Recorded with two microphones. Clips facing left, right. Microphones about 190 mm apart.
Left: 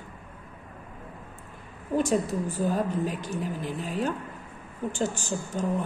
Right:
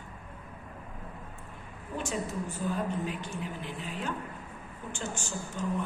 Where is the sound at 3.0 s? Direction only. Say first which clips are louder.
Left 5 dB; 40° left (ahead or behind).